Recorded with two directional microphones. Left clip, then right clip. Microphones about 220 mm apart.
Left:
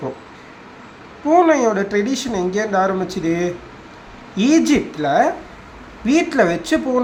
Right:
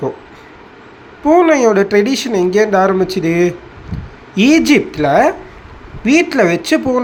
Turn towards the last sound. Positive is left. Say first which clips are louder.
# right 5 dB
turn(degrees=-15)  # may be behind; listen again after turning